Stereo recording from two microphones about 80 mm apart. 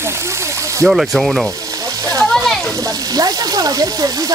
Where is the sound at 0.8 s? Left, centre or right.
Centre.